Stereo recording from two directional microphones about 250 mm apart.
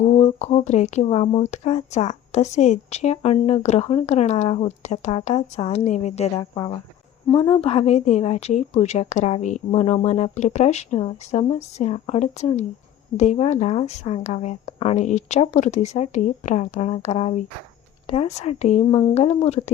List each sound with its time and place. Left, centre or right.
0.0 s speech: left